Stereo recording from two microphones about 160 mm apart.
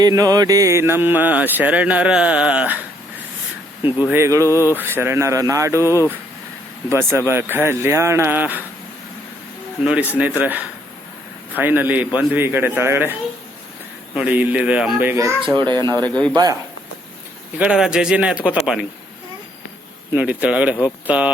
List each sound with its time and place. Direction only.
0.0 s speech: 20° right (ahead or behind)
4.0 s speech: 15° right (ahead or behind)
9.8 s speech: 10° right (ahead or behind)
14.2 s speech: 10° right (ahead or behind)
15.5 s speech: 30° right (ahead or behind)
16.0 s a man's voice: 5° left (ahead or behind)
16.3 s speech: 25° right (ahead or behind)
17.6 s speech: 5° right (ahead or behind)
20.1 s speech: 10° right (ahead or behind)